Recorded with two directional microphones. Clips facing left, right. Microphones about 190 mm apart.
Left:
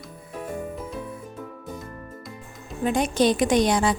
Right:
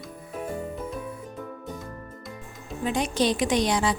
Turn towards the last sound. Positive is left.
turn(degrees=50)  # may be behind; listen again after turning